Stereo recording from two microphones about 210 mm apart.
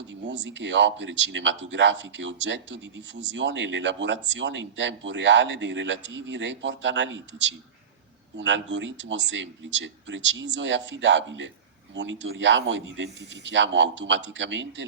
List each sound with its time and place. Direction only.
0.1 s speech: 60° right (ahead or behind)